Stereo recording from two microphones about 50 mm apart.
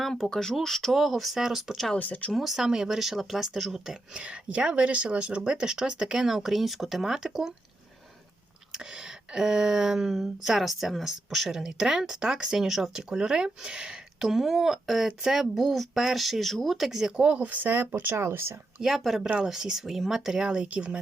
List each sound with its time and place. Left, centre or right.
0.1 s speech: centre
2.0 s speech: left
2.3 s speech: centre
8.7 s speech: centre
17.1 s speech: right
18.8 s speech: centre
20.7 s speech: right